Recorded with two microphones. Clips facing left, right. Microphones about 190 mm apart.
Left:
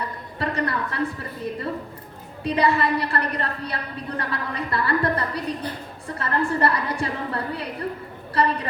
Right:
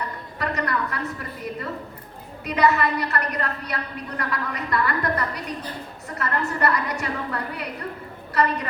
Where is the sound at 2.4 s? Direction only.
30° left (ahead or behind).